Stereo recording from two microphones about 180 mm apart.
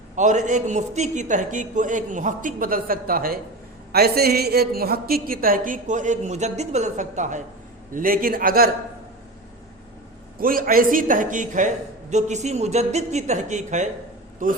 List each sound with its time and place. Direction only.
0.2 s a woman's voice: 40° right (ahead or behind)
10.4 s a woman's voice: 50° right (ahead or behind)